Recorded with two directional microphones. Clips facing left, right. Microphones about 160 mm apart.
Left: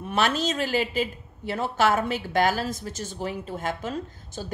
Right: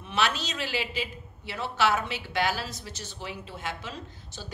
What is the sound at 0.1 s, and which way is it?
A woman's voice, 45° left (ahead or behind).